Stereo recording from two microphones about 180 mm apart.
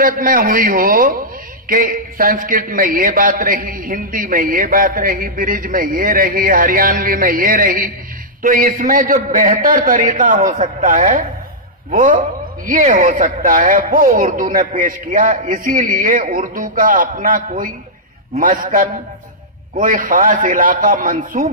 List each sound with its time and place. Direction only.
0.0 s a man's voice: 50° right (ahead or behind)